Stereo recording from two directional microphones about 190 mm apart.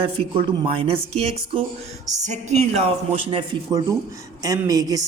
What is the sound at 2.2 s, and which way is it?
A woman's voice, 35° right (ahead or behind).